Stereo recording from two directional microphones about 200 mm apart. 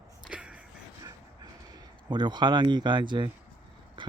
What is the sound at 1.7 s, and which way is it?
Speech, 20° right (ahead or behind).